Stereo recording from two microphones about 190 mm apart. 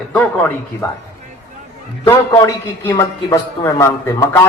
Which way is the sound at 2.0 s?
20° left (ahead or behind).